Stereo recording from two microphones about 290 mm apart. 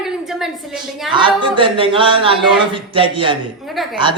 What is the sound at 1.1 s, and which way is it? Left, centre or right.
Speech, centre.